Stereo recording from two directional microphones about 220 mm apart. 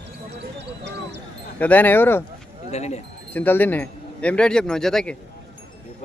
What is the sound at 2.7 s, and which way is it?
Speech, 30° left (ahead or behind).